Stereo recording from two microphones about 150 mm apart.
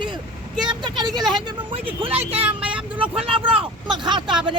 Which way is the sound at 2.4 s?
10° right (ahead or behind).